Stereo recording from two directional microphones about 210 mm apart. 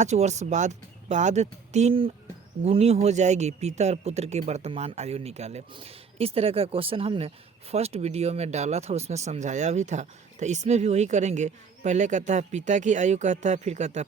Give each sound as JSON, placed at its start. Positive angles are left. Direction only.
{"t": 0.0, "sound": "speech", "side_deg": -35}